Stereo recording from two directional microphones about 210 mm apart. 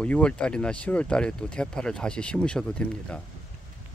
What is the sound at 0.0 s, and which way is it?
Speech, 5° left (ahead or behind).